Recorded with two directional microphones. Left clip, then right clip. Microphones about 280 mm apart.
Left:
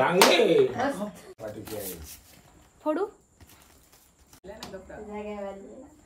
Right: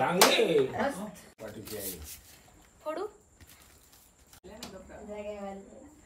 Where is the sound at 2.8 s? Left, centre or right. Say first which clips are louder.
Left 8 dB; left.